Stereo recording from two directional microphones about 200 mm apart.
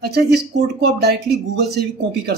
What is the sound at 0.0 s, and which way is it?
Speech, 55° right (ahead or behind).